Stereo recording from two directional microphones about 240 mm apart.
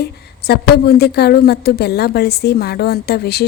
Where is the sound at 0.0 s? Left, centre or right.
Left.